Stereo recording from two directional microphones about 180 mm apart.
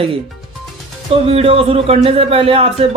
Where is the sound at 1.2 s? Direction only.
35° right (ahead or behind).